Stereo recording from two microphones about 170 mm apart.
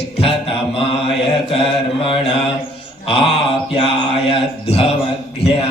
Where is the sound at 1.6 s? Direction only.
30° left (ahead or behind).